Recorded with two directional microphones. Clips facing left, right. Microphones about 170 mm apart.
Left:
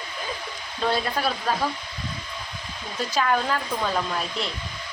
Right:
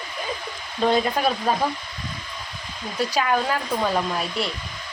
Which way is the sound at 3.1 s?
10° right (ahead or behind).